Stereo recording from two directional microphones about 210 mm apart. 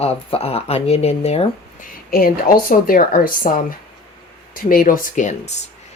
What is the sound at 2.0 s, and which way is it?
A woman's voice, 45° left (ahead or behind).